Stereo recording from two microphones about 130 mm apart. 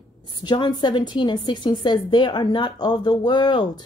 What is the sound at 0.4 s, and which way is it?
Speech, 35° left (ahead or behind).